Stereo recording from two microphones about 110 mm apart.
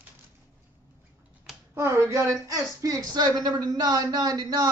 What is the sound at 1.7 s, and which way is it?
A man's voice, 20° right (ahead or behind).